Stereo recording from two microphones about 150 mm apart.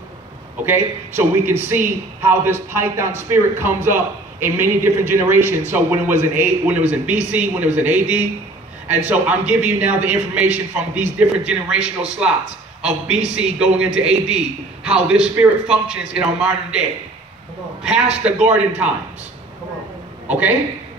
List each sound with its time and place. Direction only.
0.7 s a man's voice: 15° right (ahead or behind)
13.4 s a man's voice: 5° right (ahead or behind)
18.2 s a man's voice: 10° right (ahead or behind)
20.2 s a sound: 10° right (ahead or behind)